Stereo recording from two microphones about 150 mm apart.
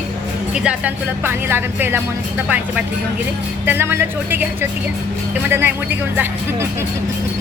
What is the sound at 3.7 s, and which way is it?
Speech, 15° right (ahead or behind).